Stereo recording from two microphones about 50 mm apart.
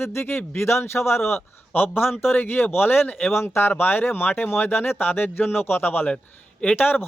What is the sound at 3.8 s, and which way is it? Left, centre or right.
Speech, left.